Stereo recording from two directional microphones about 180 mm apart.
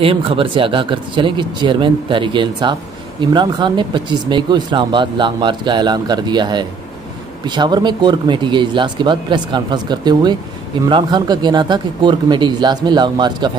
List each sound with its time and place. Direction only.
0.0 s speech: 30° right (ahead or behind)